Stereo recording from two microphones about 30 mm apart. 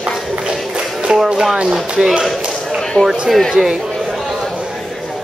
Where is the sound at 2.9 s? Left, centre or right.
Left.